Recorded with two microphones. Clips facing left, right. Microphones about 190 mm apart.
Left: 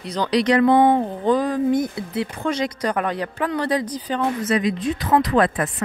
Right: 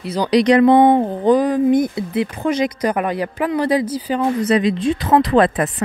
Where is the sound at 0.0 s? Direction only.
10° right (ahead or behind).